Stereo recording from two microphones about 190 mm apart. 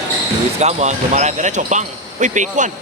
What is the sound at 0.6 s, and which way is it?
Speech, 35° right (ahead or behind).